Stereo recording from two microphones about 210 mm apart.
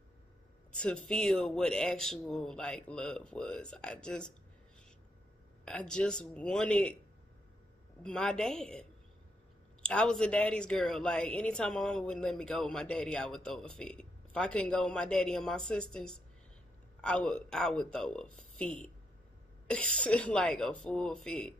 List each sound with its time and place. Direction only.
0.7 s speech: 5° left (ahead or behind)
5.7 s speech: 5° left (ahead or behind)
8.0 s speech: 5° left (ahead or behind)
9.8 s speech: 5° left (ahead or behind)